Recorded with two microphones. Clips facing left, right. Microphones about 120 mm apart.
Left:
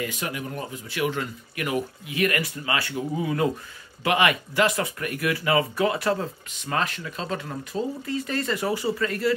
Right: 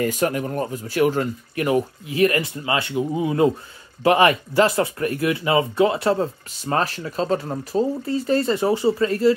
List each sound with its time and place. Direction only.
0.0 s speech: 45° right (ahead or behind)